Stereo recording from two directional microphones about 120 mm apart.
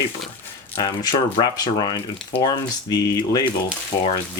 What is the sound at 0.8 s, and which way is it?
Speech, 35° left (ahead or behind).